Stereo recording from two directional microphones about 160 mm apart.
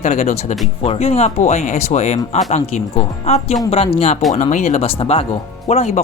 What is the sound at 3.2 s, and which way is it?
Speech, 40° left (ahead or behind).